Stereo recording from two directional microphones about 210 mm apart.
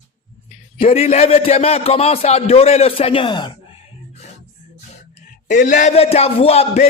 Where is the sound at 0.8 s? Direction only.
30° left (ahead or behind).